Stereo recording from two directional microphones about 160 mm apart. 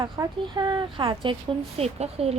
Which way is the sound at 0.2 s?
30° right (ahead or behind).